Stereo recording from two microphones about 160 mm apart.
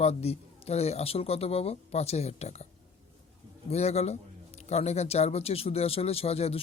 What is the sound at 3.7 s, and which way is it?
Speech, 40° left (ahead or behind).